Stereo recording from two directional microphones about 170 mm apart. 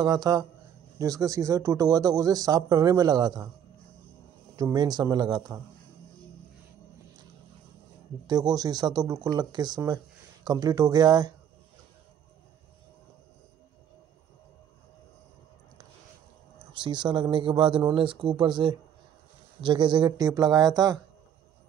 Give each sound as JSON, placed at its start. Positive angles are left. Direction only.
{"t": 0.0, "sound": "speech", "side_deg": -20}
{"t": 4.6, "sound": "speech", "side_deg": -25}
{"t": 8.3, "sound": "speech", "side_deg": -25}
{"t": 16.8, "sound": "speech", "side_deg": -25}